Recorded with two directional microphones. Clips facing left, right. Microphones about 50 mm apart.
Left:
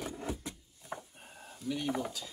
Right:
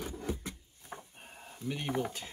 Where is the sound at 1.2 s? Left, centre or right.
Right.